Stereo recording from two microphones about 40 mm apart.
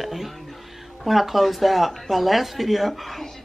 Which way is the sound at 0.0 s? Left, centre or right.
Centre.